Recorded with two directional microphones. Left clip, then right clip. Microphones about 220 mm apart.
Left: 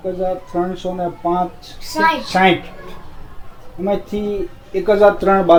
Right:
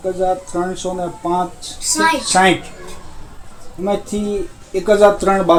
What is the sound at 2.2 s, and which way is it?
Speech, 25° right (ahead or behind).